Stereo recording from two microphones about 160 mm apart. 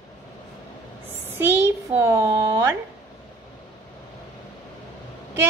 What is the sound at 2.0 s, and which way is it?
Speech, 15° right (ahead or behind).